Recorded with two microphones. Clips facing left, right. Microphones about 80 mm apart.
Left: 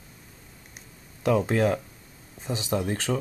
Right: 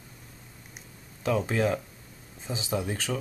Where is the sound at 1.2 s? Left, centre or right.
Centre.